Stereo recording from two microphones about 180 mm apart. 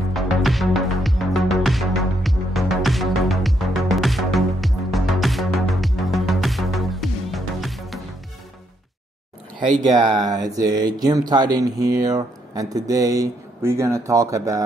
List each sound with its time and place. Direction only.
0.1 s music: centre (ahead or behind)
10.0 s speech: 20° right (ahead or behind)